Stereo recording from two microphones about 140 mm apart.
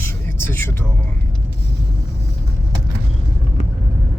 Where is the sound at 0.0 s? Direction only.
15° left (ahead or behind).